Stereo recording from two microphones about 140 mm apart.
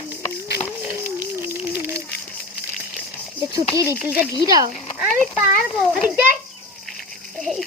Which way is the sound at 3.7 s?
15° right (ahead or behind).